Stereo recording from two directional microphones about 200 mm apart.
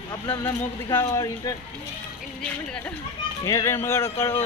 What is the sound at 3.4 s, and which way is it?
Speech, 15° left (ahead or behind).